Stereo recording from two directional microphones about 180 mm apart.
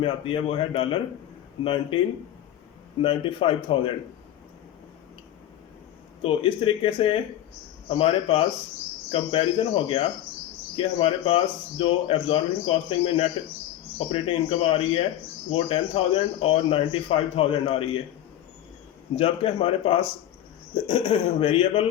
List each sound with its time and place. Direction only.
0.0 s speech: 30° left (ahead or behind)
3.0 s speech: 30° left (ahead or behind)
6.2 s speech: 30° left (ahead or behind)
19.1 s speech: 30° left (ahead or behind)